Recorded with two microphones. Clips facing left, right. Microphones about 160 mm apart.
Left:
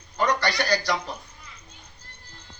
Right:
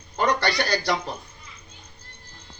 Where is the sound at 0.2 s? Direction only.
30° right (ahead or behind).